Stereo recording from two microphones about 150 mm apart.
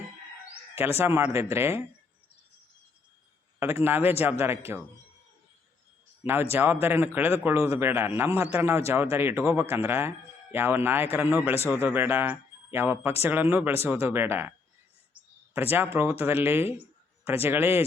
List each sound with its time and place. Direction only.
0.8 s a man's voice: 15° right (ahead or behind)
3.6 s a man's voice: 15° right (ahead or behind)
6.2 s a man's voice: 15° right (ahead or behind)
15.5 s a man's voice: 15° right (ahead or behind)